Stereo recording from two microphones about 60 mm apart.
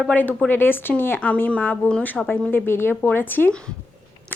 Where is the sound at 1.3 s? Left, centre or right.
Left.